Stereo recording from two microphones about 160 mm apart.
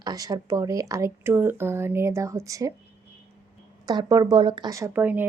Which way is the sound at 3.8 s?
25° right (ahead or behind).